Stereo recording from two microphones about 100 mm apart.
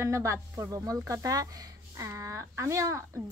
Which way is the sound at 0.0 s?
30° right (ahead or behind).